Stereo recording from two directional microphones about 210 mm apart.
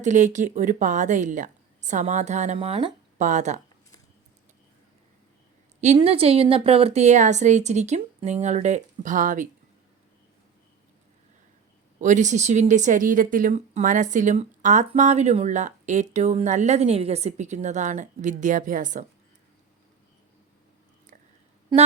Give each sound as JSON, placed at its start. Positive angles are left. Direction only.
{"t": 0.0, "sound": "a woman's voice", "side_deg": -35}
{"t": 5.8, "sound": "a woman's voice", "side_deg": -30}
{"t": 11.9, "sound": "a woman's voice", "side_deg": -35}
{"t": 21.7, "sound": "a sound", "side_deg": -20}